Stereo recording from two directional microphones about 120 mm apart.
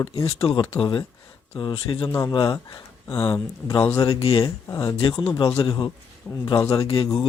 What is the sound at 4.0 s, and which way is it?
Speech, 55° left (ahead or behind).